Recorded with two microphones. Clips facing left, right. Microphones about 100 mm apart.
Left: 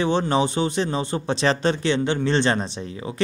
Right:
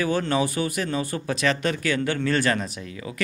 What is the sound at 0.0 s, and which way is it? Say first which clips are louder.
Speech: left 3 dB; 25° left (ahead or behind).